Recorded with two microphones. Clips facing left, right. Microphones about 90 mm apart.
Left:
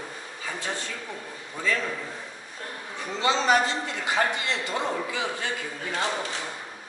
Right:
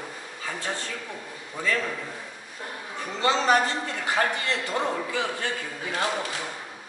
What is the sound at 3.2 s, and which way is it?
A woman's voice, 15° left (ahead or behind).